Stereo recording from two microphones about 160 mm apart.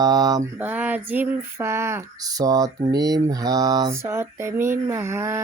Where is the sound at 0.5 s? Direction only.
10° right (ahead or behind).